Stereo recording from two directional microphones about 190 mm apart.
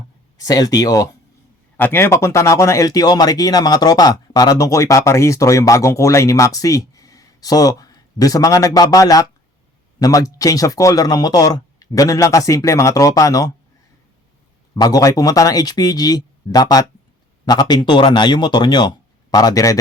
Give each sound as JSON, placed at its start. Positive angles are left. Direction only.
{"t": 0.3, "sound": "speech", "side_deg": 20}
{"t": 14.8, "sound": "speech", "side_deg": 20}